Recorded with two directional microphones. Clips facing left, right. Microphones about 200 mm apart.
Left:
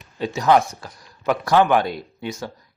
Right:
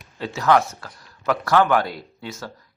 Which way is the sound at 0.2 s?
20° left (ahead or behind).